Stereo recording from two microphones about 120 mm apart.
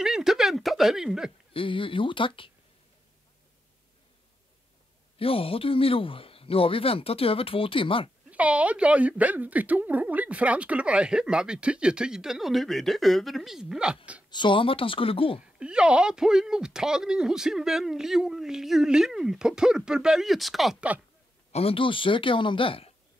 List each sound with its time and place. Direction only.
0.0 s a sound: 5° right (ahead or behind)
1.5 s speech: 45° left (ahead or behind)
5.2 s speech: 50° left (ahead or behind)
8.3 s speech: 10° right (ahead or behind)
14.3 s speech: 45° left (ahead or behind)
15.6 s speech: 10° right (ahead or behind)
21.5 s speech: 55° left (ahead or behind)